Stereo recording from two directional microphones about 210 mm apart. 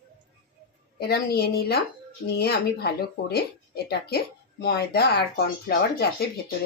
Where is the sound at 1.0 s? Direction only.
50° left (ahead or behind).